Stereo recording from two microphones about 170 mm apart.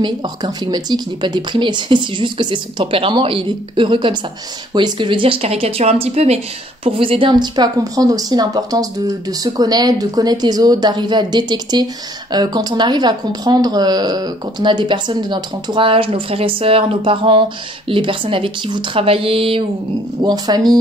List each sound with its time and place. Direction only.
0.0 s speech: 25° right (ahead or behind)